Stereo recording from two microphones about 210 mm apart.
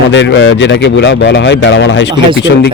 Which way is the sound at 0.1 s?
60° left (ahead or behind).